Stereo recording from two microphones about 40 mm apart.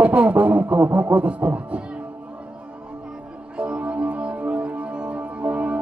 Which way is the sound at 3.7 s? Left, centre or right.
Right.